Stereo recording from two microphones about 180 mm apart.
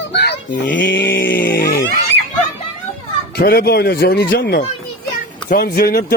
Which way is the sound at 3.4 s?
60° left (ahead or behind).